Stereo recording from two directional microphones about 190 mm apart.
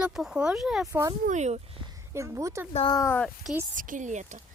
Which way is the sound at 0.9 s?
15° right (ahead or behind).